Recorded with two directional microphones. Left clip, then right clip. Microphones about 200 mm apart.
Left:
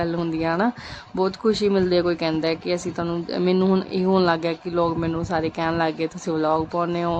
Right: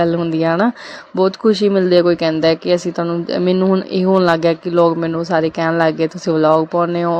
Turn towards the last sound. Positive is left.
turn(degrees=-15)  # may be behind; listen again after turning